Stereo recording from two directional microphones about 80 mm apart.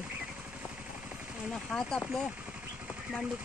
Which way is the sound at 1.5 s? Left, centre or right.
Centre.